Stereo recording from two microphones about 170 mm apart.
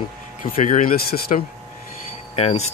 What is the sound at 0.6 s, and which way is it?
Speech, 50° left (ahead or behind).